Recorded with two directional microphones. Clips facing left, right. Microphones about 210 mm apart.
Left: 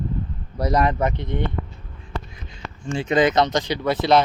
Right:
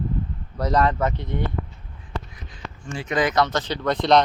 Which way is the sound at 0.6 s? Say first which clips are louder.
Left 1 dB; 10° left (ahead or behind).